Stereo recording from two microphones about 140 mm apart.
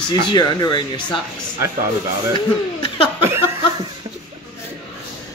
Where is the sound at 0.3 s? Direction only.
30° left (ahead or behind).